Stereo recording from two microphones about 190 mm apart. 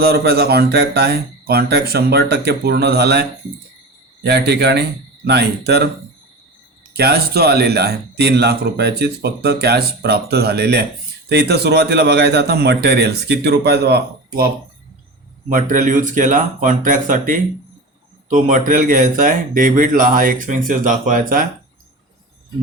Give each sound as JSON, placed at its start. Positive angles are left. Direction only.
{"t": 0.0, "sound": "speech", "side_deg": -55}
{"t": 6.9, "sound": "speech", "side_deg": -55}